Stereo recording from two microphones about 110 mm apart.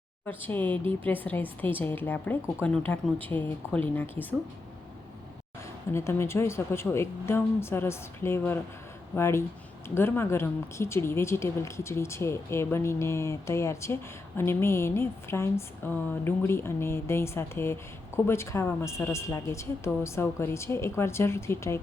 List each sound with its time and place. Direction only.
0.3 s speech: 20° left (ahead or behind)
5.9 s speech: 25° left (ahead or behind)